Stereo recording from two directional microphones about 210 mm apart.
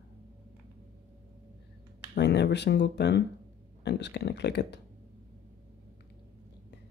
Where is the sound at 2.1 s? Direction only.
55° left (ahead or behind).